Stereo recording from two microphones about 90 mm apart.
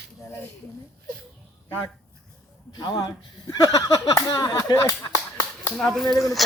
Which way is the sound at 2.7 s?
50° left (ahead or behind).